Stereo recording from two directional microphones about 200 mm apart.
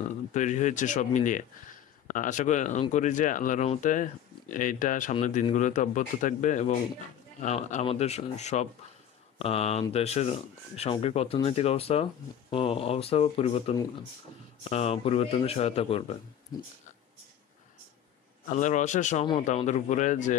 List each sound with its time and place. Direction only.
0.3 s speech: 35° left (ahead or behind)
14.6 s speech: 30° left (ahead or behind)
18.5 s speech: 35° left (ahead or behind)